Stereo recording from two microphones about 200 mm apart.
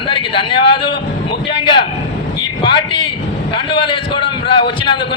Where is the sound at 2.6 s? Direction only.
25° left (ahead or behind).